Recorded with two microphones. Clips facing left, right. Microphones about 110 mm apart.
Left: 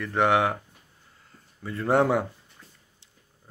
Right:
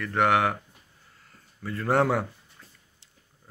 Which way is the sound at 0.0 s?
20° left (ahead or behind).